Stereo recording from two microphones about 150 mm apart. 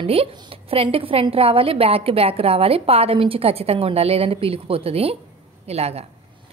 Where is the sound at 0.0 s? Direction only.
40° right (ahead or behind).